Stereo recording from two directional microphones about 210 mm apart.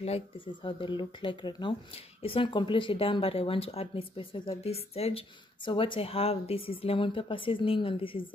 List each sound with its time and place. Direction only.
0.7 s speech: 25° left (ahead or behind)